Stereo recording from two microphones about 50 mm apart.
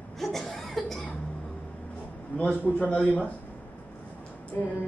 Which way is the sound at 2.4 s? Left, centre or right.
Left.